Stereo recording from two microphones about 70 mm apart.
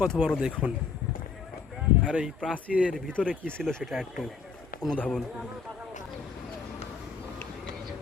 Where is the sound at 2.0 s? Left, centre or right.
Centre.